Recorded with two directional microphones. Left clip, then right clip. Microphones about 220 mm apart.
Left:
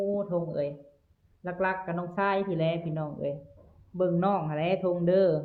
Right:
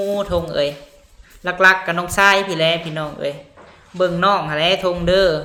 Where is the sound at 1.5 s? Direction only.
20° right (ahead or behind).